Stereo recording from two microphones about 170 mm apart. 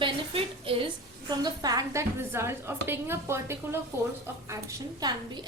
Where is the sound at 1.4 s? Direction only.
20° right (ahead or behind).